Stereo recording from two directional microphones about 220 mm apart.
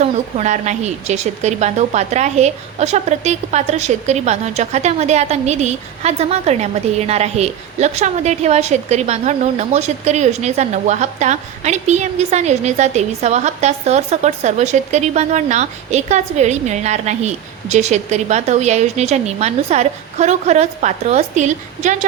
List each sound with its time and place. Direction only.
0.0 s a woman's voice: 30° right (ahead or behind)